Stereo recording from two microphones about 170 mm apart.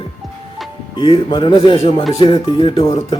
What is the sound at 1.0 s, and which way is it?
Speech, 30° left (ahead or behind).